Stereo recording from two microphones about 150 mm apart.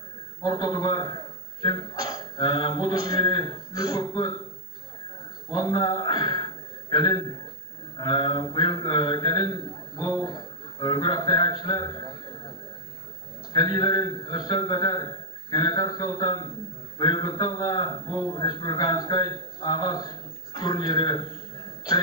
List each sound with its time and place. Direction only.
0.4 s a man's voice: 25° left (ahead or behind)
5.5 s a man's voice: 25° left (ahead or behind)